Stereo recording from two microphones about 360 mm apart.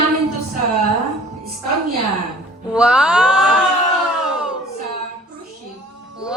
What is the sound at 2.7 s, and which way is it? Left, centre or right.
Speech, centre.